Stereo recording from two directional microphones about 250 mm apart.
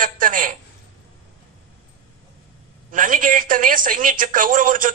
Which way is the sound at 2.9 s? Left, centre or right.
Right.